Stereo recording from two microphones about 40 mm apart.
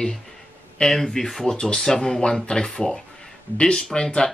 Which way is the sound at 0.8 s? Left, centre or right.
Centre.